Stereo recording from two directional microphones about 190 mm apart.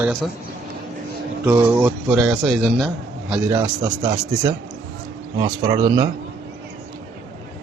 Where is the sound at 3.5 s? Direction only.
15° right (ahead or behind).